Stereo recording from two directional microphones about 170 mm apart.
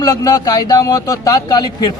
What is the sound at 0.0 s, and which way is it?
A man's voice, 20° left (ahead or behind).